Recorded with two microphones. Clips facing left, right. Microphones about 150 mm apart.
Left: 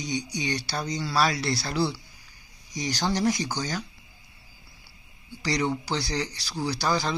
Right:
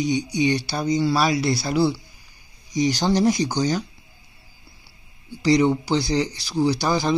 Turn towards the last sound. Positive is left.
turn(degrees=-20)  # may be behind; listen again after turning